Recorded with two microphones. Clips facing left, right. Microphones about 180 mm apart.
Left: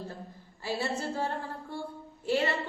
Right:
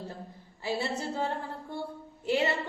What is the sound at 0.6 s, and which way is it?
A woman's voice, 20° right (ahead or behind).